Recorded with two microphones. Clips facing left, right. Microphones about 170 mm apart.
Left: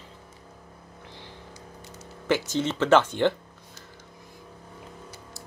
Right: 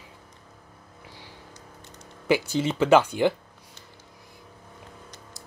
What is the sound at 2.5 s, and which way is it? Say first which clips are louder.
Speech: right 1 dB; 10° right (ahead or behind).